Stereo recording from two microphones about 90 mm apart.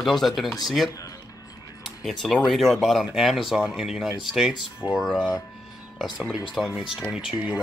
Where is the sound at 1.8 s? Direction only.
Centre (ahead or behind).